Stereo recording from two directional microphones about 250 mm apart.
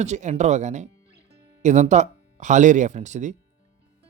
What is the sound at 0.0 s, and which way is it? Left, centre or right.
Speech, right.